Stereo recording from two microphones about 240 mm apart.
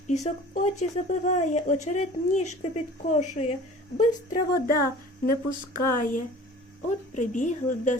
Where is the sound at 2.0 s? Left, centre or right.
Left.